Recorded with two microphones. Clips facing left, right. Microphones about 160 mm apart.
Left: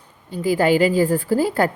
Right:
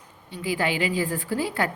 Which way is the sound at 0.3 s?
40° left (ahead or behind).